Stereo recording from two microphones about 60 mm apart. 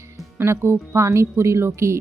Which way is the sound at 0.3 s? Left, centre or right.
Right.